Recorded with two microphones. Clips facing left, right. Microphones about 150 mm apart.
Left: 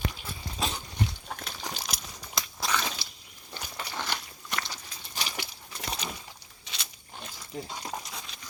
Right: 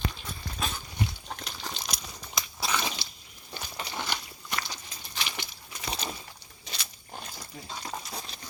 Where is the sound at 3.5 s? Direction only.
15° right (ahead or behind).